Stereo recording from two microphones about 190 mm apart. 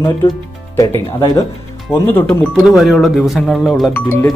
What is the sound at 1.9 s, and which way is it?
Speech, 10° left (ahead or behind).